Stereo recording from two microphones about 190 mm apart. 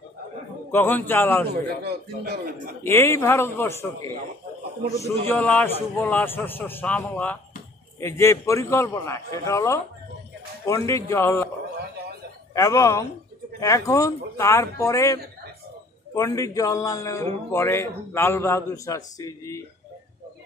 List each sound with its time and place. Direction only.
0.7 s a man's voice: 10° left (ahead or behind)
1.5 s a man's voice: 55° right (ahead or behind)
2.8 s a man's voice: 15° left (ahead or behind)
5.3 s a man's voice: 10° left (ahead or behind)
12.5 s a man's voice: 15° left (ahead or behind)
16.2 s a man's voice: 15° left (ahead or behind)